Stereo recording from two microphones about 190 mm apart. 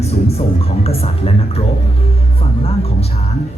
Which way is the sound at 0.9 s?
30° left (ahead or behind).